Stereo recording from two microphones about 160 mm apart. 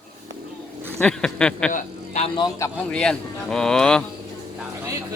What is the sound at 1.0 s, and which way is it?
Speech, 5° left (ahead or behind).